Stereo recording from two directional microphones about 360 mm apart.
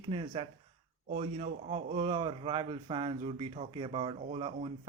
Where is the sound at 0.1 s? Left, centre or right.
Centre.